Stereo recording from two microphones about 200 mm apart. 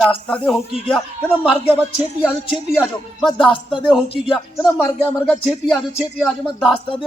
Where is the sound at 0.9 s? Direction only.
5° left (ahead or behind).